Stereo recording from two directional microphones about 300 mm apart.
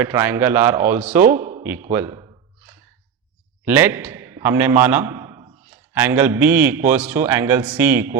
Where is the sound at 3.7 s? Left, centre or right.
Centre.